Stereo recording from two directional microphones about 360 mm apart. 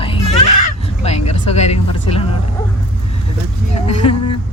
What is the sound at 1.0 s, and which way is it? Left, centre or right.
Speech, centre.